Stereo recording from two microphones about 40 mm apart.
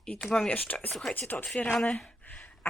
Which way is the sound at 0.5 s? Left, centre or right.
Left.